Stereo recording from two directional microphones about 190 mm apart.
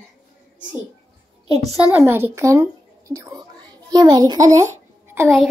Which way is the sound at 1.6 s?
10° right (ahead or behind).